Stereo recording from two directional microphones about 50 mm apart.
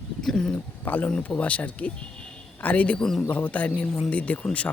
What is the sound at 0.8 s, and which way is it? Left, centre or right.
Speech, left.